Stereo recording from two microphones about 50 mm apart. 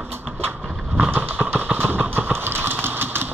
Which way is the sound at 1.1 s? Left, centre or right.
Right.